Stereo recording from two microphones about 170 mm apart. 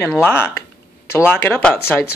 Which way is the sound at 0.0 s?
10° left (ahead or behind).